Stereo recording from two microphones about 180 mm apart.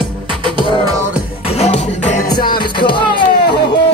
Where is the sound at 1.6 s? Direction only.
40° left (ahead or behind).